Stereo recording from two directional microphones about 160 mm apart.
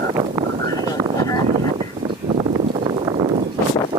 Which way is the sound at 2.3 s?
30° right (ahead or behind).